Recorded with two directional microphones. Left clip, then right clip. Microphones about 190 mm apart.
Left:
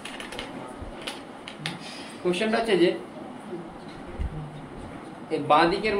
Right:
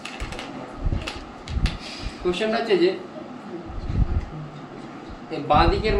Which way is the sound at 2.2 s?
30° left (ahead or behind).